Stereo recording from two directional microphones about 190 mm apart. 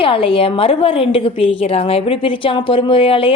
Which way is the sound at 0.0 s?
30° left (ahead or behind).